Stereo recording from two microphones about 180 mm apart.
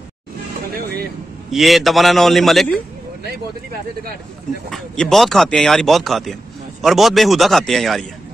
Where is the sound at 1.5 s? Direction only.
Centre (ahead or behind).